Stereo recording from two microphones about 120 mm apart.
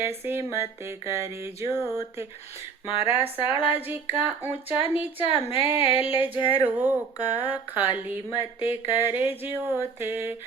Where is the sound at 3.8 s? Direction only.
15° right (ahead or behind).